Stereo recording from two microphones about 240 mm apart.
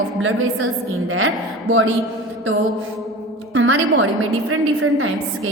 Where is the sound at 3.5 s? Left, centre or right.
Right.